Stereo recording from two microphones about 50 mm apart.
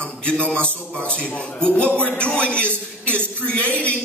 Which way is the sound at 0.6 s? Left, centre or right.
Right.